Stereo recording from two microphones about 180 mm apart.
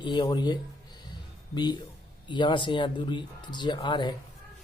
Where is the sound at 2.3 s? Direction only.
25° left (ahead or behind).